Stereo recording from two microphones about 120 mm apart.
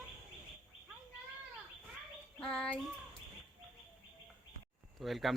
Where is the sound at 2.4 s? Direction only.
5° left (ahead or behind).